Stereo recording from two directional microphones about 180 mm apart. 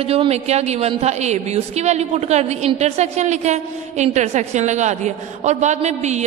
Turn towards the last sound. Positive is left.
turn(degrees=-40)  # may be behind; listen again after turning